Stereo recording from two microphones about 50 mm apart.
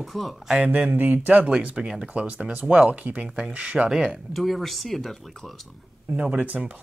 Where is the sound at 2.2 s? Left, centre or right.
Right.